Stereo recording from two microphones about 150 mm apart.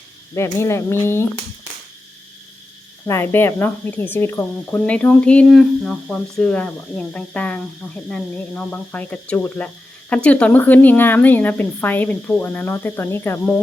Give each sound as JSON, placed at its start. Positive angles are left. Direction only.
{"t": 0.3, "sound": "speech", "side_deg": 20}
{"t": 3.1, "sound": "speech", "side_deg": 15}